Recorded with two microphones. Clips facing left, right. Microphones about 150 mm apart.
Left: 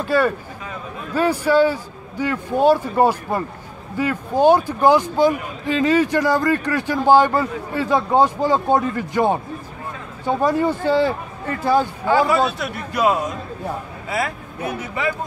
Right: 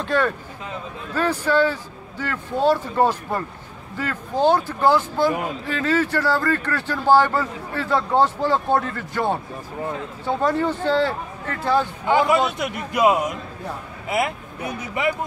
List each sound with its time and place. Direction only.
0.0 s speech: 5° left (ahead or behind)
12.1 s a man's voice: 20° right (ahead or behind)